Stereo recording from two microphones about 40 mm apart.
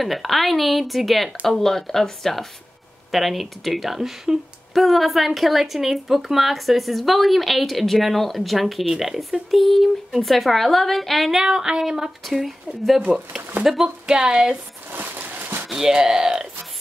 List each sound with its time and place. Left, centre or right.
0.0 s speech: centre
9.5 s speech: centre
11.4 s speech: centre
13.8 s speech: right
14.9 s a sound: right
15.7 s speech: centre